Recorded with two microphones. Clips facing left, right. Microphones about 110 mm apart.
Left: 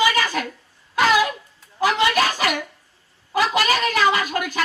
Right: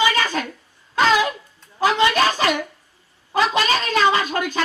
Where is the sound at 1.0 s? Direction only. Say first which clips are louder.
Even; 25° right (ahead or behind).